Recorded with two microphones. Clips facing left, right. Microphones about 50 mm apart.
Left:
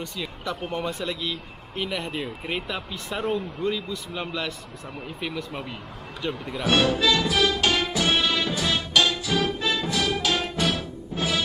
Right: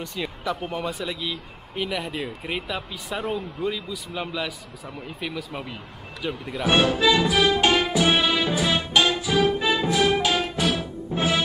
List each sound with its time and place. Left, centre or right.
0.0 s speech: centre
7.5 s music: right
7.8 s music: centre
9.3 s music: centre
10.3 s music: centre
11.1 s music: right